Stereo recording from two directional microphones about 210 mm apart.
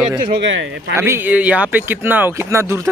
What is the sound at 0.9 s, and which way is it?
Speech, 10° right (ahead or behind).